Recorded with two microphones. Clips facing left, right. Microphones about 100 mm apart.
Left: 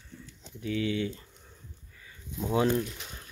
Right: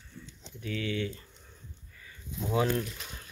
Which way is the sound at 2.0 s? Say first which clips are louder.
Left 2 dB; 25° left (ahead or behind).